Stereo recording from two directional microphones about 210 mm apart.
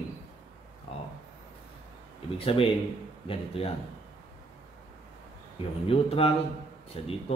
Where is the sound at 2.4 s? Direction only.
25° left (ahead or behind).